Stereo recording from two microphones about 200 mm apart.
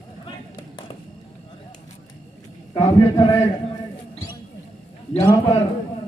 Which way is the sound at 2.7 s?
20° left (ahead or behind).